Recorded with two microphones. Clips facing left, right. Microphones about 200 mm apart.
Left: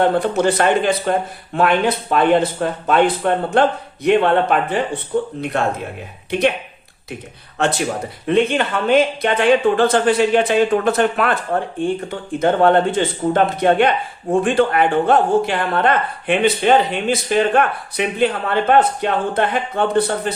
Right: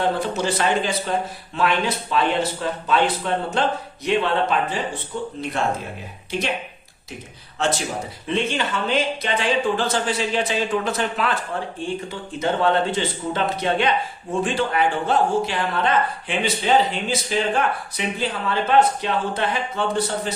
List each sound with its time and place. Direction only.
0.0 s a man's voice: 55° left (ahead or behind)
8.3 s a man's voice: 55° left (ahead or behind)
12.4 s a man's voice: 55° left (ahead or behind)